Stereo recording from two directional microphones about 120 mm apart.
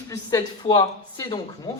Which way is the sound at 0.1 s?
30° left (ahead or behind).